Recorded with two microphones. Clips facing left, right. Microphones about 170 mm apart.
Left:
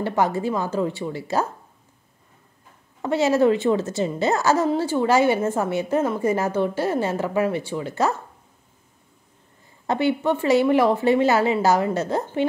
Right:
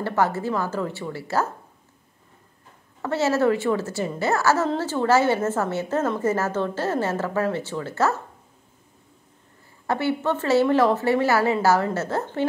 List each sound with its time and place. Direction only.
0.0 s a woman's voice: 15° left (ahead or behind)
3.0 s a woman's voice: 15° left (ahead or behind)
9.8 s a woman's voice: 15° left (ahead or behind)